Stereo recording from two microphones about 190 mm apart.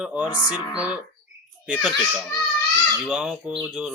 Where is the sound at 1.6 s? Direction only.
5° right (ahead or behind).